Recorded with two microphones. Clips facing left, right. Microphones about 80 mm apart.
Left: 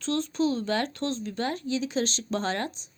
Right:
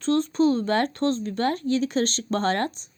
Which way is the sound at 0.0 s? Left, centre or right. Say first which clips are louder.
Right 6 dB; right.